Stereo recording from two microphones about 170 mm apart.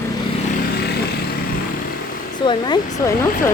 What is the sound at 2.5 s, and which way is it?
Speech, 25° left (ahead or behind).